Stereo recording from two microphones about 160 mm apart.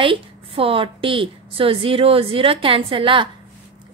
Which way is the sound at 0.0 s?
35° right (ahead or behind).